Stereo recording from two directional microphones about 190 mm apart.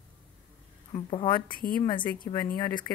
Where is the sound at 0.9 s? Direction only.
25° left (ahead or behind).